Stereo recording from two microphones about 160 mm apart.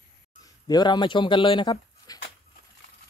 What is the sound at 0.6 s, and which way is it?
Speech, 25° left (ahead or behind).